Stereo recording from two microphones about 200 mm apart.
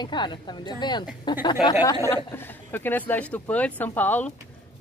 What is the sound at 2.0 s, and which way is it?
Speech, 10° left (ahead or behind).